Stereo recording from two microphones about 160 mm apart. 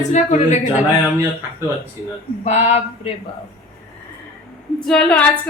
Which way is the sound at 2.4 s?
45° left (ahead or behind).